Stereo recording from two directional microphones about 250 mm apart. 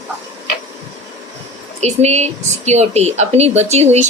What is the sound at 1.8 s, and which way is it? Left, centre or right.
A woman's voice, right.